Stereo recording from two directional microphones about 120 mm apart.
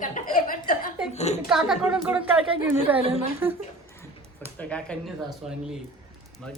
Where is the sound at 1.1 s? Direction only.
65° left (ahead or behind).